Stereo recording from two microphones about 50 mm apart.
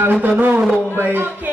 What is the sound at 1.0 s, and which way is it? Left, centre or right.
Speech, right.